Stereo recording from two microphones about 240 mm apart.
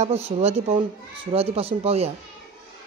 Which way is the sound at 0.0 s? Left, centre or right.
Right.